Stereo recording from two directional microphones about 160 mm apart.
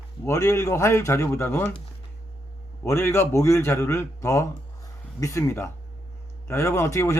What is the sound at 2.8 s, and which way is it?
A man's voice, 15° left (ahead or behind).